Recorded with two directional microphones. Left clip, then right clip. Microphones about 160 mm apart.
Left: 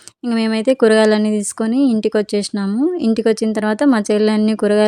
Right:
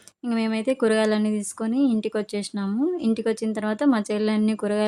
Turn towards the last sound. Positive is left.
turn(degrees=40)  # may be behind; listen again after turning